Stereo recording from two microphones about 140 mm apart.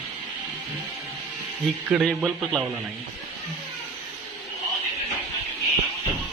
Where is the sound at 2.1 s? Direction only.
Centre (ahead or behind).